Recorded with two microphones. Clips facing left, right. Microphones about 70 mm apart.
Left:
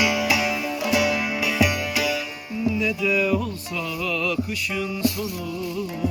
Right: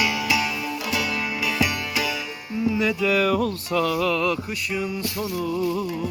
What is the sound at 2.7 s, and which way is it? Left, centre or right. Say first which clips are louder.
Music: right 2 dB; right.